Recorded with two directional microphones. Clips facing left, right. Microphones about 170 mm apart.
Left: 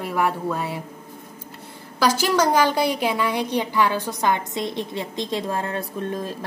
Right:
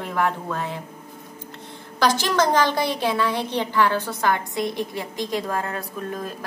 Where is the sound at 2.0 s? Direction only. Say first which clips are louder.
Left 1 dB; 10° left (ahead or behind).